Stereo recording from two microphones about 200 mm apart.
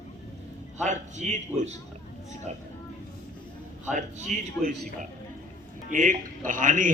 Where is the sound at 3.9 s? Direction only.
40° right (ahead or behind).